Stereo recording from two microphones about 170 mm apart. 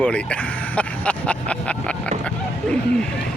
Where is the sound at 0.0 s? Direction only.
5° left (ahead or behind).